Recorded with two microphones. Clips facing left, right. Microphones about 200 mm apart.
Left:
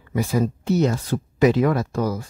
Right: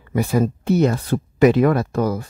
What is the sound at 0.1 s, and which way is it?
Speech, 60° right (ahead or behind).